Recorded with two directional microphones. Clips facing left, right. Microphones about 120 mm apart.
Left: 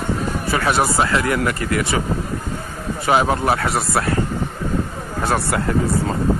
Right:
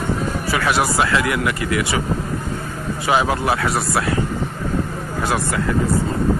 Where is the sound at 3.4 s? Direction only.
25° left (ahead or behind).